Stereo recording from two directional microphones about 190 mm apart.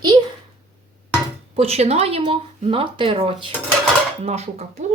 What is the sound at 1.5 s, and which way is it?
Speech, 30° right (ahead or behind).